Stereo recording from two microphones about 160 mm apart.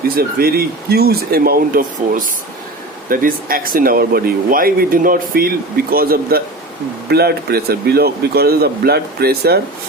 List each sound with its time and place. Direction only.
0.2 s speech: 70° right (ahead or behind)
7.1 s speech: 85° right